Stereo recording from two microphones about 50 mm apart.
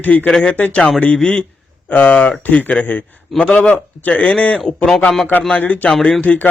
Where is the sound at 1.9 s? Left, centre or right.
Left.